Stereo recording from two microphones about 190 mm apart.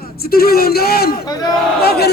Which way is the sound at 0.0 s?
55° left (ahead or behind).